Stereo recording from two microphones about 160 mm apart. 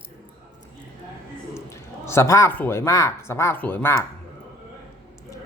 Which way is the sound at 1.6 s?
15° left (ahead or behind).